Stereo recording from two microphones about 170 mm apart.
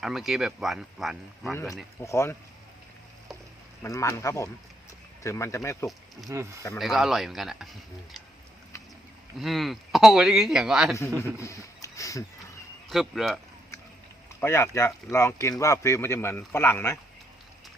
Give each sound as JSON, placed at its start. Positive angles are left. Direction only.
{"t": 0.0, "sound": "speech", "side_deg": 0}
{"t": 1.5, "sound": "speech", "side_deg": 15}
{"t": 3.8, "sound": "speech", "side_deg": 15}
{"t": 6.3, "sound": "speech", "side_deg": -15}
{"t": 6.7, "sound": "speech", "side_deg": 0}
{"t": 9.4, "sound": "speech", "side_deg": 0}
{"t": 11.3, "sound": "speech", "side_deg": 20}
{"t": 12.9, "sound": "speech", "side_deg": 0}
{"t": 14.4, "sound": "speech", "side_deg": 15}